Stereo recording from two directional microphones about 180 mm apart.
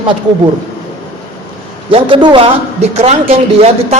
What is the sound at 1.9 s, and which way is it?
A man's voice, 30° right (ahead or behind).